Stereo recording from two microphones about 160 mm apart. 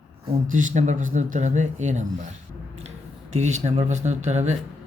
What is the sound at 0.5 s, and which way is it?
Speech, 50° right (ahead or behind).